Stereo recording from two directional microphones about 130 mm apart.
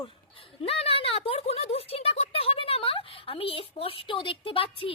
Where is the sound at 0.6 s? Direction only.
50° left (ahead or behind).